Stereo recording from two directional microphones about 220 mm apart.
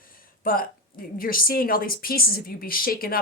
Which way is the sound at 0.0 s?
40° left (ahead or behind).